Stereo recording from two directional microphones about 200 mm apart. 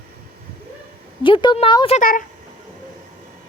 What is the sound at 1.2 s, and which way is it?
Speech, 25° left (ahead or behind).